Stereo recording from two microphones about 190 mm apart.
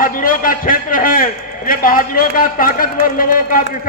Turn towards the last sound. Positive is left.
turn(degrees=50)  # may be behind; listen again after turning